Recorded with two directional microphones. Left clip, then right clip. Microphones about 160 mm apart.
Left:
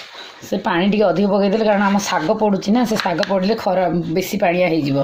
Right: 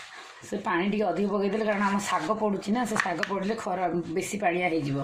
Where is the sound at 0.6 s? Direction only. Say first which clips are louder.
Left 10 dB; 60° left (ahead or behind).